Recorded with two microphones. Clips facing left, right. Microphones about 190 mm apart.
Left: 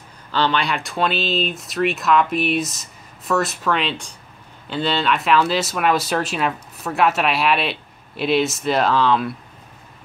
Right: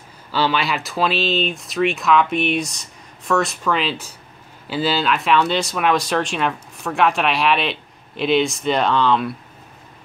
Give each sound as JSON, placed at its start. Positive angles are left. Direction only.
{"t": 0.3, "sound": "speech", "side_deg": -5}